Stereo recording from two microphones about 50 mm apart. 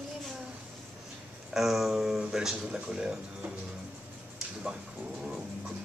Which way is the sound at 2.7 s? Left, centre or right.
Centre.